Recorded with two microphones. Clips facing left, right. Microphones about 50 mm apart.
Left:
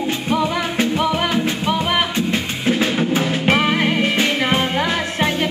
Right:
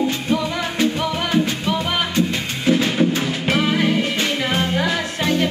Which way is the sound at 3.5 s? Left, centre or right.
Left.